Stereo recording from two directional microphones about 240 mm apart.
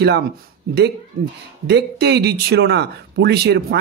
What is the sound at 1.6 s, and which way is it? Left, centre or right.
Speech, right.